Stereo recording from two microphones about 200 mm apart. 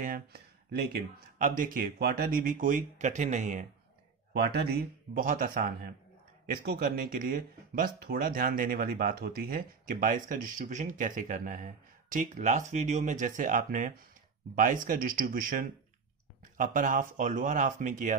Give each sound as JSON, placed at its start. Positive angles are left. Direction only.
{"t": 0.0, "sound": "a sound", "side_deg": -50}
{"t": 1.4, "sound": "speech", "side_deg": -45}
{"t": 4.3, "sound": "speech", "side_deg": -55}
{"t": 16.5, "sound": "speech", "side_deg": -40}